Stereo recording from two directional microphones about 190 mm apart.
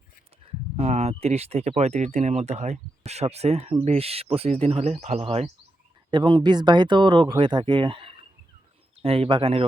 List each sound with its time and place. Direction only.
0.4 s speech: 30° right (ahead or behind)